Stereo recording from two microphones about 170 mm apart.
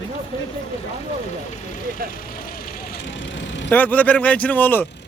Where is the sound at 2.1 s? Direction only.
55° left (ahead or behind); by 3.6 s 90° left.